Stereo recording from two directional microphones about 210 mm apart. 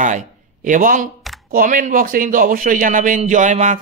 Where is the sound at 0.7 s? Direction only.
40° right (ahead or behind).